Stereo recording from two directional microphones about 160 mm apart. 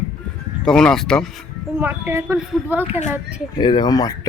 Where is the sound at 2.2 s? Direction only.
Centre (ahead or behind).